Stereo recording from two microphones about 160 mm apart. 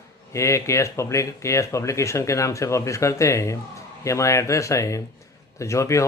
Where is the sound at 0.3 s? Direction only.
20° left (ahead or behind).